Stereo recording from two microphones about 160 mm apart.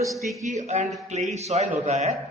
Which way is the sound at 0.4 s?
45° right (ahead or behind).